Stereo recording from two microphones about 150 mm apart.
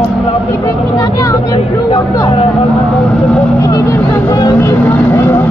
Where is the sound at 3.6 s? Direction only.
25° left (ahead or behind).